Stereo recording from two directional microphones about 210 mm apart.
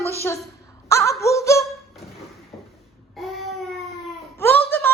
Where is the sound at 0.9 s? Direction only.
15° left (ahead or behind).